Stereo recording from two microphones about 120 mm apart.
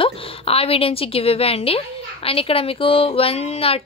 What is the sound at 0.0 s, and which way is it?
A woman's voice, 50° left (ahead or behind).